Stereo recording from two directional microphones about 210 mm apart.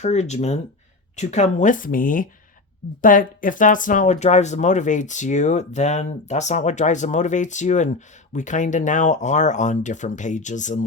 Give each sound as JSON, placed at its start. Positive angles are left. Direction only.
{"t": 0.0, "sound": "speech", "side_deg": 35}